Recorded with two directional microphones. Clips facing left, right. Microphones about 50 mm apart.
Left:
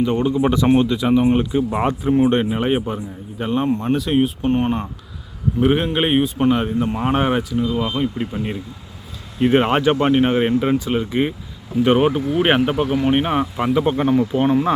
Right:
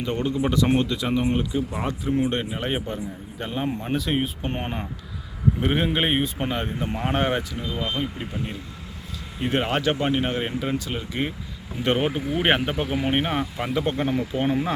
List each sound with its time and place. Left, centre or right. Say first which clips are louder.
0.0 s a man's voice: left 7 dB; centre
0.3 s speech: left 5 dB; left
1.4 s speech: left 7 dB; left
2.1 s a man's voice: left 8 dB; left; by 8.3 s centre
9.4 s speech: left 8 dB; left
11.8 s a man's voice: left 8 dB; centre